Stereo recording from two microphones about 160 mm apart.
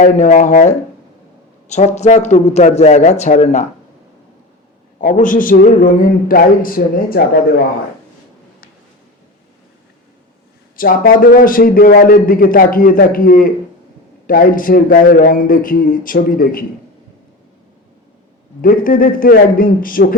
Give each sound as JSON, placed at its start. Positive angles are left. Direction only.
{"t": 0.0, "sound": "a man's voice", "side_deg": 50}
{"t": 4.9, "sound": "a man's voice", "side_deg": 55}
{"t": 10.8, "sound": "a man's voice", "side_deg": 65}
{"t": 18.6, "sound": "a man's voice", "side_deg": 60}